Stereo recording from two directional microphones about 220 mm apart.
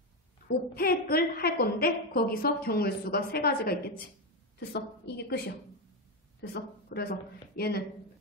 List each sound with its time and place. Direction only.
0.5 s a woman's voice: 45° left (ahead or behind)
6.4 s a woman's voice: 45° left (ahead or behind)